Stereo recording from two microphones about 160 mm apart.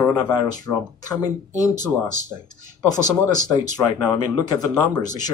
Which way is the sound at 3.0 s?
25° left (ahead or behind).